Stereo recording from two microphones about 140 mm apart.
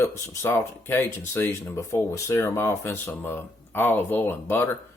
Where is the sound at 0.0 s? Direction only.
15° left (ahead or behind).